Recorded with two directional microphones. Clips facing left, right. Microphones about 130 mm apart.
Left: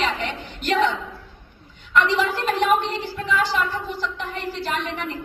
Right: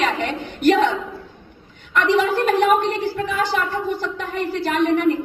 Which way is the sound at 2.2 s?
50° right (ahead or behind).